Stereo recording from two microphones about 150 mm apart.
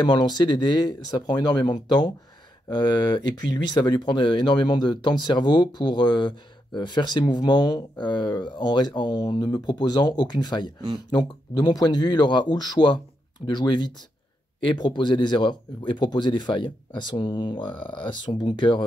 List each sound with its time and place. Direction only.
0.0 s speech: 30° left (ahead or behind)